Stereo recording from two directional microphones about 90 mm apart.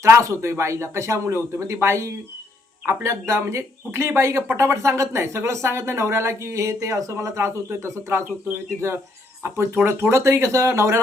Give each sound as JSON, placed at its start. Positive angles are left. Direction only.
{"t": 0.0, "sound": "speech", "side_deg": -35}
{"t": 9.4, "sound": "speech", "side_deg": -25}